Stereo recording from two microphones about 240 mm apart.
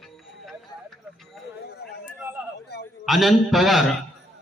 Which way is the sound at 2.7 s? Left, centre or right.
Left.